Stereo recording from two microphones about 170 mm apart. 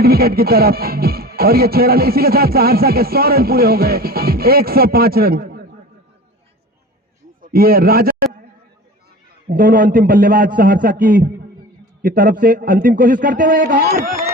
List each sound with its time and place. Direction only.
0.0 s music: 65° right (ahead or behind)
7.4 s a man's voice: 60° right (ahead or behind)
9.5 s music: 55° right (ahead or behind)
12.0 s a man's voice: 55° right (ahead or behind)